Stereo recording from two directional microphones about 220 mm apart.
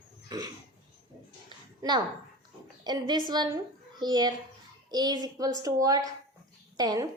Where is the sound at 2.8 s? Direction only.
20° right (ahead or behind).